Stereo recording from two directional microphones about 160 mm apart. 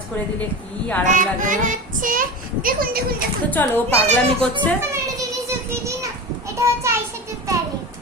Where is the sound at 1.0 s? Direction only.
55° right (ahead or behind).